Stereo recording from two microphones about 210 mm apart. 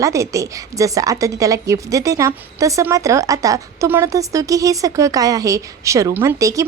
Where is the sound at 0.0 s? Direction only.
15° right (ahead or behind).